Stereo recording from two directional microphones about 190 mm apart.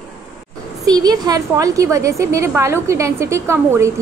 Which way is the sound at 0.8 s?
20° right (ahead or behind).